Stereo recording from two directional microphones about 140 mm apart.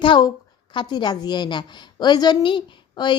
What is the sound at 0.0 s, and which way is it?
A woman's voice, 35° left (ahead or behind).